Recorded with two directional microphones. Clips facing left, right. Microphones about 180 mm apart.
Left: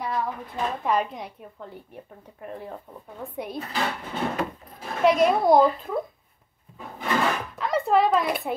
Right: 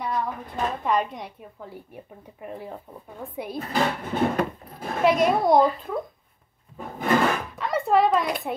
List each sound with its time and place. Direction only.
0.0 s a woman's voice: centre (ahead or behind)
3.5 s speech: 50° right (ahead or behind)
5.0 s a woman's voice: centre (ahead or behind)
6.8 s wood: 50° right (ahead or behind)
7.5 s a sound: centre (ahead or behind)